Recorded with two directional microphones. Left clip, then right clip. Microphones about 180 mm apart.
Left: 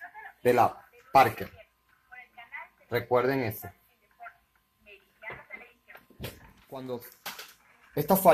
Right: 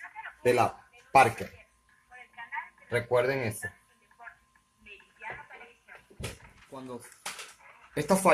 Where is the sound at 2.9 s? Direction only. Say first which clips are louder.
Left 1 dB; 20° left (ahead or behind).